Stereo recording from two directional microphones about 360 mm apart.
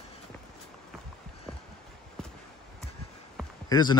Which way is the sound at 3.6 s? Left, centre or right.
Centre.